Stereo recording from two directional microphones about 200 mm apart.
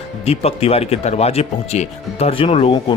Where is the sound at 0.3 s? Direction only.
30° left (ahead or behind).